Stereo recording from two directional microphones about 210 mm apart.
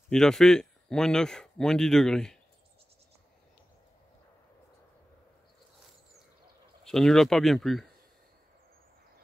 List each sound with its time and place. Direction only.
0.1 s speech: centre (ahead or behind)
6.8 s speech: centre (ahead or behind)